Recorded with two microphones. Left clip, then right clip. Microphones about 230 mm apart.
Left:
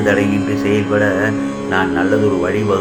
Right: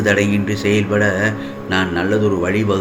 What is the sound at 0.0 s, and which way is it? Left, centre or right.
Speech, right.